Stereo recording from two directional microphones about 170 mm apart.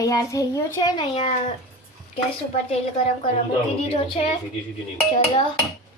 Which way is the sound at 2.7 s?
35° left (ahead or behind).